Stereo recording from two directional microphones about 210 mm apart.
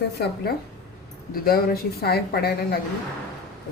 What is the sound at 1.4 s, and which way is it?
Speech, 45° left (ahead or behind).